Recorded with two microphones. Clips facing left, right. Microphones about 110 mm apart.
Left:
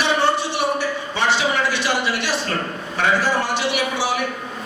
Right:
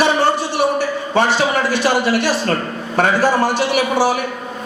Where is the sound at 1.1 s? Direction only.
45° right (ahead or behind).